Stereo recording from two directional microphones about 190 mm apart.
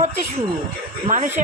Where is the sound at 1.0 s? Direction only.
40° right (ahead or behind).